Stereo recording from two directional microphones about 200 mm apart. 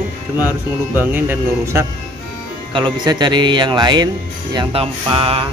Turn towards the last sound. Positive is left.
turn(degrees=-25)  # may be behind; listen again after turning